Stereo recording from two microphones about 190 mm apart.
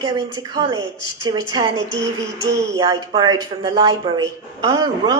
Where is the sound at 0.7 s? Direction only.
20° right (ahead or behind).